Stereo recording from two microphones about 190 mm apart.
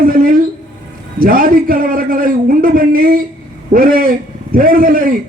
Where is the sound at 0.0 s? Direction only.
45° right (ahead or behind).